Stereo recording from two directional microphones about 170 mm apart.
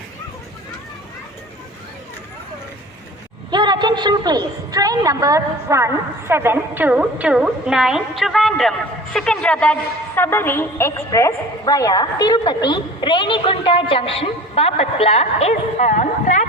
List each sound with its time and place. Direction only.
3.5 s a woman's voice: 25° right (ahead or behind); by 16.5 s 45° left (ahead or behind)